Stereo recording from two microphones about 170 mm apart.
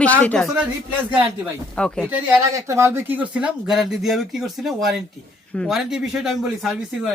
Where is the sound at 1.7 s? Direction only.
5° left (ahead or behind).